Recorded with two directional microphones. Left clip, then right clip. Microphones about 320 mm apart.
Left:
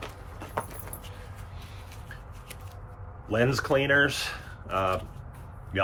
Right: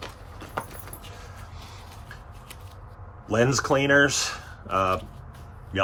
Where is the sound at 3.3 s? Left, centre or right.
Centre.